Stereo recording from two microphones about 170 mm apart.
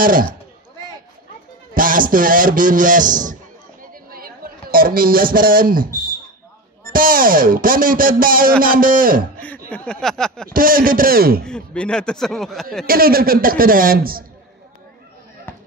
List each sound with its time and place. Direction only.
0.0 s a man's voice: 55° right (ahead or behind)
1.8 s a man's voice: 55° right (ahead or behind)
3.8 s a sound: 60° right (ahead or behind)
6.9 s a man's voice: 55° right (ahead or behind)
9.7 s speech: 5° left (ahead or behind)
10.5 s a man's voice: 55° right (ahead or behind)
11.4 s speech: 5° left (ahead or behind)
12.8 s a man's voice: 60° right (ahead or behind)